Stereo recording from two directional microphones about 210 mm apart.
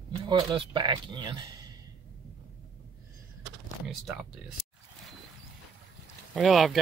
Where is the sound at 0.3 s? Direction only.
20° right (ahead or behind).